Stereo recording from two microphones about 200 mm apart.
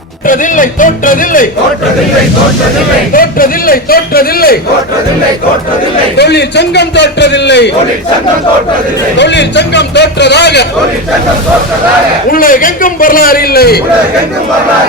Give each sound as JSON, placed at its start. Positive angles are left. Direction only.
{"t": 0.3, "sound": "a man's voice", "side_deg": 40}
{"t": 3.1, "sound": "a man's voice", "side_deg": 45}
{"t": 6.1, "sound": "a man's voice", "side_deg": 55}
{"t": 9.1, "sound": "a man's voice", "side_deg": 60}
{"t": 12.3, "sound": "a man's voice", "side_deg": 45}